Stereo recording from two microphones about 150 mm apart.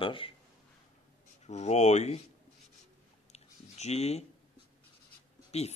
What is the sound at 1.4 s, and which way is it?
Speech, 50° left (ahead or behind).